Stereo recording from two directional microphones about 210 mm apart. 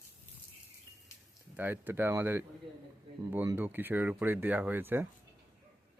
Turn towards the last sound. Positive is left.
turn(degrees=-10)  # may be behind; listen again after turning